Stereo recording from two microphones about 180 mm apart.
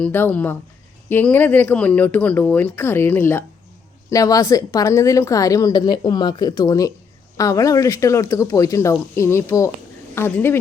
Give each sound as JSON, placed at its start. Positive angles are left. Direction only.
{"t": 0.0, "sound": "a woman's voice", "side_deg": 10}